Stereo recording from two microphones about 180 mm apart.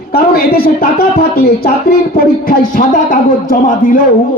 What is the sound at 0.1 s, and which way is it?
Speech, 55° left (ahead or behind).